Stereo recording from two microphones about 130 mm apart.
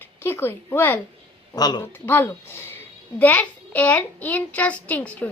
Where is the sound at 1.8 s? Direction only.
15° left (ahead or behind).